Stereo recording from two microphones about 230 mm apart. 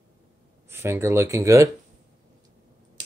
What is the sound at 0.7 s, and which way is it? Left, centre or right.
Speech, centre.